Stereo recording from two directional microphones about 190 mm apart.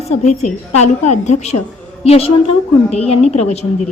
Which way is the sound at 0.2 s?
35° left (ahead or behind).